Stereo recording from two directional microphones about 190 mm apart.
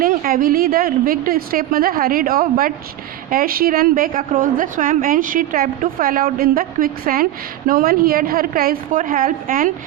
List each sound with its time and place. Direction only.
0.0 s a woman's voice: 50° right (ahead or behind)